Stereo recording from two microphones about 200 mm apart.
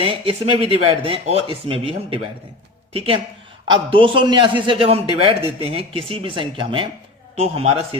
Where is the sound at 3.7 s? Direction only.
25° right (ahead or behind).